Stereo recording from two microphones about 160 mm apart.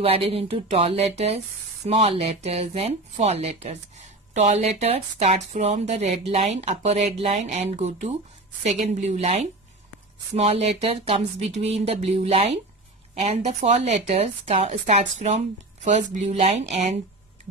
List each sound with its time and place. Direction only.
0.0 s speech: 35° right (ahead or behind)